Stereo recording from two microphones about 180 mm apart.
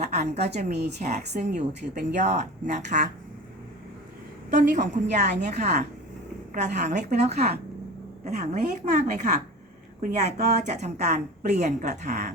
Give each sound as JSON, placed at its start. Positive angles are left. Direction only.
{"t": 0.0, "sound": "speech", "side_deg": -40}
{"t": 4.5, "sound": "speech", "side_deg": -40}